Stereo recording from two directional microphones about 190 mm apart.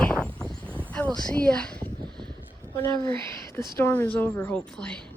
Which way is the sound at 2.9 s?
20° left (ahead or behind).